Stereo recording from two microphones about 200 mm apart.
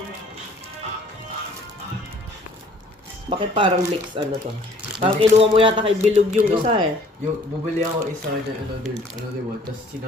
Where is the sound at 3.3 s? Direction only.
25° right (ahead or behind).